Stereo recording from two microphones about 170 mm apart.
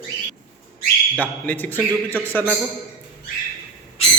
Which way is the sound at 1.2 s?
10° left (ahead or behind).